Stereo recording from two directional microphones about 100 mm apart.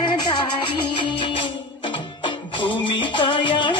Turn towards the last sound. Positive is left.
turn(degrees=55)  # may be behind; listen again after turning